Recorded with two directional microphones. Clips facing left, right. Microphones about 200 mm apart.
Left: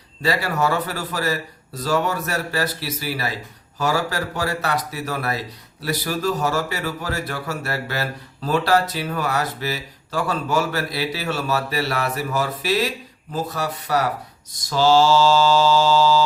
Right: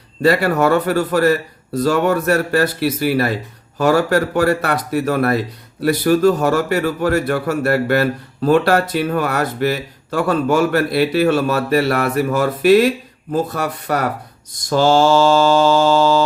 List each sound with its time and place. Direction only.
0.2 s a man's voice: 55° right (ahead or behind)
13.3 s mantra: 55° right (ahead or behind)